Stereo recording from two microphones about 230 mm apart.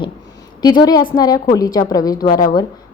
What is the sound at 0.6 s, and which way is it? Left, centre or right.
A woman's voice, centre.